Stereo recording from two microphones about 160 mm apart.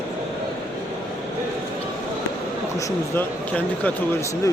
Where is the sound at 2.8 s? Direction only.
10° left (ahead or behind).